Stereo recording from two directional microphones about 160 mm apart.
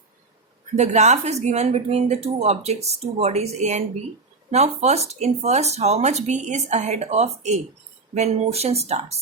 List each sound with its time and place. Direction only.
0.8 s speech: 45° right (ahead or behind)